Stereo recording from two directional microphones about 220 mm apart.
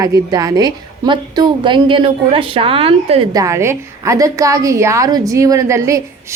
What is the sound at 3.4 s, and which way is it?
A woman's voice, 15° right (ahead or behind).